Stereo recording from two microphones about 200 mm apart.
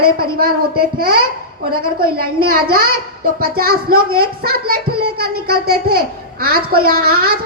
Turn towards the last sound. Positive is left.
turn(degrees=-50)  # may be behind; listen again after turning